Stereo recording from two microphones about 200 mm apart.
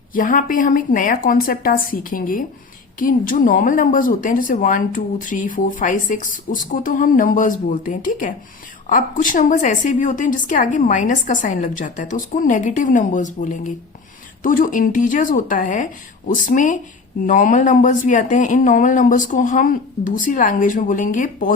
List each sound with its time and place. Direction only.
0.1 s a woman's voice: 45° left (ahead or behind)